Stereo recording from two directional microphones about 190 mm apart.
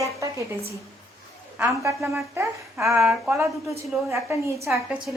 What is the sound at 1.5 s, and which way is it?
A woman's voice, 5° right (ahead or behind).